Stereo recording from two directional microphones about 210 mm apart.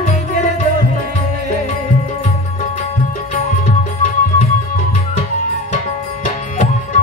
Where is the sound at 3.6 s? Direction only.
40° left (ahead or behind).